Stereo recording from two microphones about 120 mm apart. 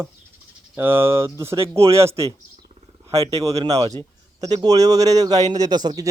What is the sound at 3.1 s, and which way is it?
Speech, 55° right (ahead or behind).